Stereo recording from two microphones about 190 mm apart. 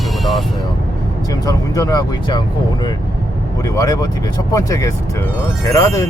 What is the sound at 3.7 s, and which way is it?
Speech, 20° left (ahead or behind).